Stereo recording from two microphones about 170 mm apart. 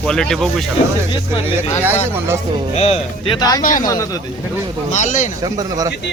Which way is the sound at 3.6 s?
50° left (ahead or behind).